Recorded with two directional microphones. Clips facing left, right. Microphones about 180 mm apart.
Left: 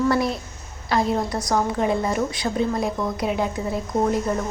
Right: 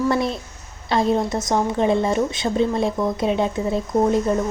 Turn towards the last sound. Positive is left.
turn(degrees=-25)  # may be behind; listen again after turning